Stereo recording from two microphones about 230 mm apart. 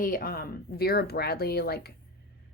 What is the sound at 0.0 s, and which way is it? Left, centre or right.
Speech, left.